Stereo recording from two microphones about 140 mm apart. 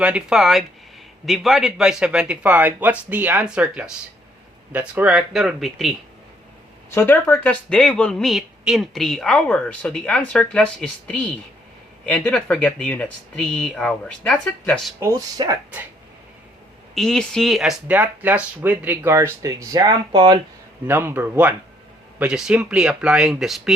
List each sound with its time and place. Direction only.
0.0 s speech: 5° right (ahead or behind)
6.9 s speech: 15° left (ahead or behind)
14.9 s speech: 25° right (ahead or behind)
16.9 s speech: 5° left (ahead or behind); by 20.4 s 35° right (ahead or behind)
20.8 s speech: 15° right (ahead or behind)